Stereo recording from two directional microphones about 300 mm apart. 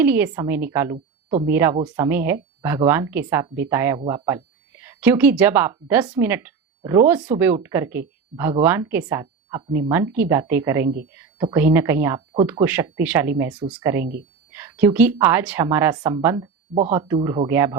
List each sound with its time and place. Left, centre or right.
0.0 s speech: centre
0.9 s a sound: right
1.5 s speech: centre
10.8 s speech: right
11.1 s a sound: centre
11.5 s speech: centre